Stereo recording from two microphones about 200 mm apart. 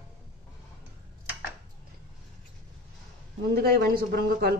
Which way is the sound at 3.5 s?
50° right (ahead or behind).